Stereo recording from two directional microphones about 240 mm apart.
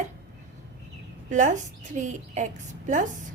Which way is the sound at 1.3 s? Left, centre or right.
Right.